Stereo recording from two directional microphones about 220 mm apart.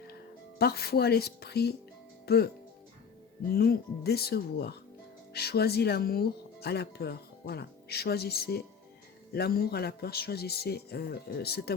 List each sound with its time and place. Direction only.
0.6 s speech: 45° left (ahead or behind)
3.5 s speech: 45° left (ahead or behind)